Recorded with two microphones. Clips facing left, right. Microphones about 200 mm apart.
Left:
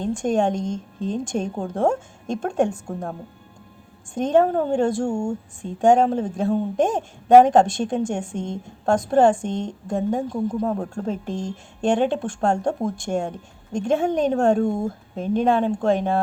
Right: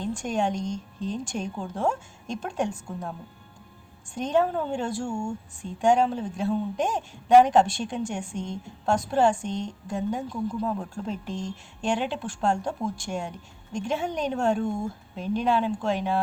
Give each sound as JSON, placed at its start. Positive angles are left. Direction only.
{"t": 0.2, "sound": "speech", "side_deg": 50}
{"t": 5.1, "sound": "speech", "side_deg": 45}